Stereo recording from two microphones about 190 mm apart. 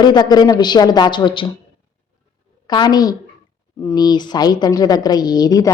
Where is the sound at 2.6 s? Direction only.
20° left (ahead or behind).